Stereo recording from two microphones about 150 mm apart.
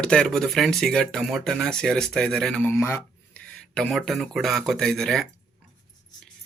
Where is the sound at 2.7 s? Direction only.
15° left (ahead or behind).